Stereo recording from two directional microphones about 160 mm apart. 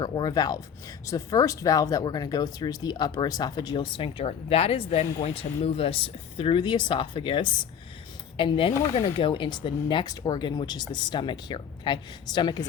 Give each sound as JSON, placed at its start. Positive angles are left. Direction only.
{"t": 0.0, "sound": "speech", "side_deg": 25}